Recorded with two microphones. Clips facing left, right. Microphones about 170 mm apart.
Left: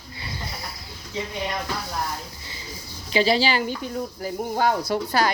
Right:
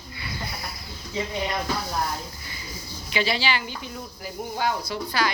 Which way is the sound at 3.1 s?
35° left (ahead or behind).